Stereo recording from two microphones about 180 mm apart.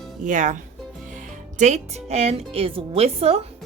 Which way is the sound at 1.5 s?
40° right (ahead or behind).